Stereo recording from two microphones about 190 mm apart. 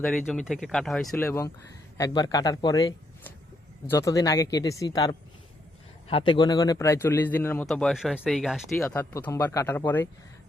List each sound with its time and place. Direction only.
0.0 s a man's voice: 5° left (ahead or behind)
8.9 s a man's voice: 10° left (ahead or behind)